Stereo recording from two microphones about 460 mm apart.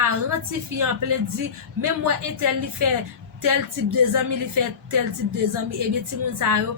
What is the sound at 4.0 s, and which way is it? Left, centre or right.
Speech, right.